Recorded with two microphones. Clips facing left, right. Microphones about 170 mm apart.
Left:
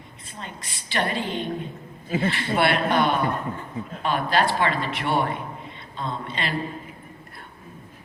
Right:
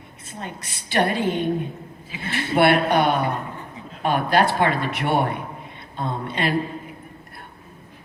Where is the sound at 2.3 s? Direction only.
60° right (ahead or behind).